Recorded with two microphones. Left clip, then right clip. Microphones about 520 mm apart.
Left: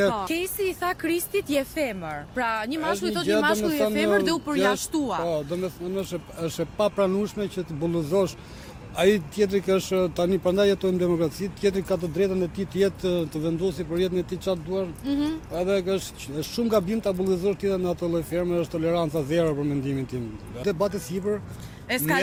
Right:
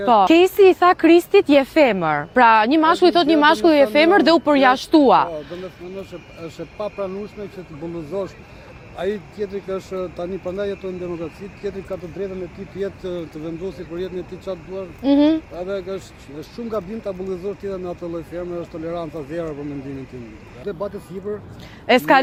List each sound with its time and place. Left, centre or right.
0.1 s speech: right
1.8 s speech: right
6.0 s speech: left
8.1 s speech: left
15.0 s speech: right
15.5 s speech: left
20.7 s speech: left
21.8 s speech: right